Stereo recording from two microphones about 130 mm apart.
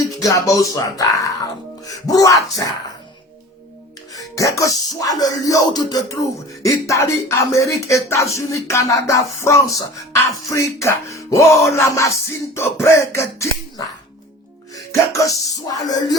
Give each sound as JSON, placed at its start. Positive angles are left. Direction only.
{"t": 0.0, "sound": "music", "side_deg": 25}
{"t": 4.1, "sound": "music", "side_deg": 25}